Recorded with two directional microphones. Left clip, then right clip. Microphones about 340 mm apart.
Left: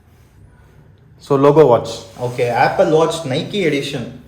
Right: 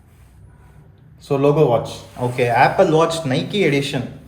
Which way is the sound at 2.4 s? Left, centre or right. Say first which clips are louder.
Even; right.